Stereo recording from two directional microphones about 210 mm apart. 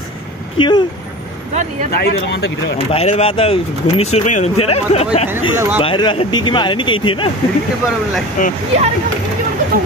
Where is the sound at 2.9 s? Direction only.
30° left (ahead or behind).